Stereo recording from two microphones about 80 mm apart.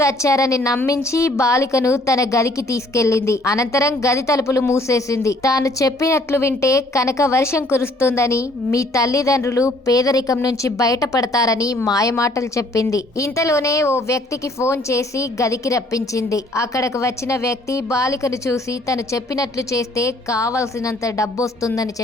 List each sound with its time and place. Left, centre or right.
0.0 s a woman's voice: left